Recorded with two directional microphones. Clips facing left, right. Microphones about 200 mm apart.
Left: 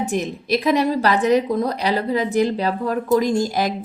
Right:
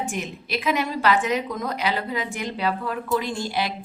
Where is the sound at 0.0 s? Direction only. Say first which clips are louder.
Left 7 dB; 40° left (ahead or behind).